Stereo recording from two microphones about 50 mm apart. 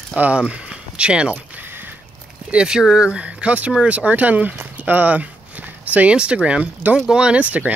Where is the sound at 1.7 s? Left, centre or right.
Right.